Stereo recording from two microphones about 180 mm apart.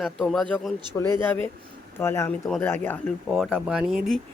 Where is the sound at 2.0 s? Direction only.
15° left (ahead or behind).